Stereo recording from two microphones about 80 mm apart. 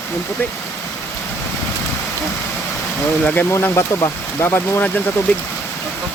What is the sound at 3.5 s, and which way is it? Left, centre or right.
Speech, left.